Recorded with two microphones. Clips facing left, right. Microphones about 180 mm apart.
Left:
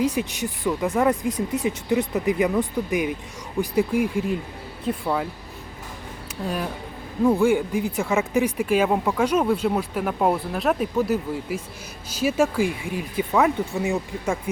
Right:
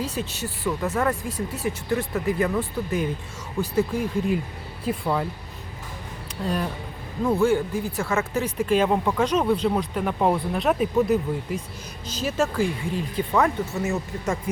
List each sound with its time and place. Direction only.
0.0 s speech: 15° left (ahead or behind)
4.9 s speech: centre (ahead or behind)
6.4 s speech: 5° left (ahead or behind)